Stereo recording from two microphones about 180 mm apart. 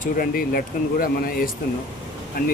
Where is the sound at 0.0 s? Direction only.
55° left (ahead or behind).